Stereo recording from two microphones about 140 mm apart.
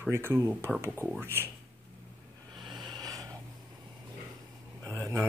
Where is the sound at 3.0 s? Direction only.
25° right (ahead or behind).